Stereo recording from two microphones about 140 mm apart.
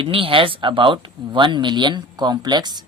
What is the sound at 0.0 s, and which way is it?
Speech, 40° right (ahead or behind).